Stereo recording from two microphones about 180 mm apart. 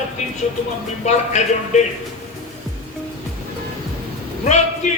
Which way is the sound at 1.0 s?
40° left (ahead or behind).